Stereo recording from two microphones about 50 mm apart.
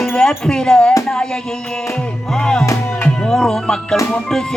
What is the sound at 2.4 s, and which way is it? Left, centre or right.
Speech, centre.